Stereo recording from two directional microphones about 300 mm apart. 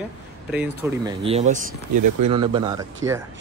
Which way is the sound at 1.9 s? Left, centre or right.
Right.